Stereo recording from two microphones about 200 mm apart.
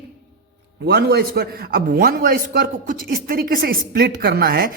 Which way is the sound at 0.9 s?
55° right (ahead or behind).